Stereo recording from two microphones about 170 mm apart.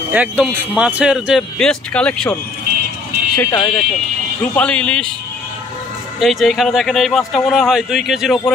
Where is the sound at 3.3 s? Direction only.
15° left (ahead or behind).